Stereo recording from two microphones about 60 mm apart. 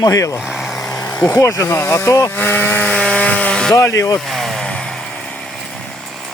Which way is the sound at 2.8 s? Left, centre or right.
Centre.